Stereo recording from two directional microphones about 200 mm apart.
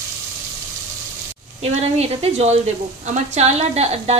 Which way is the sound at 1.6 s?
30° right (ahead or behind).